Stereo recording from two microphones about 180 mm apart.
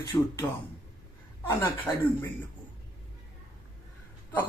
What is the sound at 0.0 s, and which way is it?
Speech, 15° left (ahead or behind).